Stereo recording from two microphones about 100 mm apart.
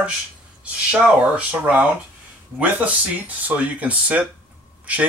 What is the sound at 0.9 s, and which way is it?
Speech, 15° right (ahead or behind).